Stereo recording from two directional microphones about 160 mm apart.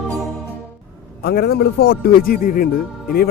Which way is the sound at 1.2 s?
80° left.